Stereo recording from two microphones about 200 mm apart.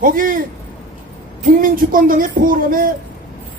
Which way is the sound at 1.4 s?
45° right (ahead or behind).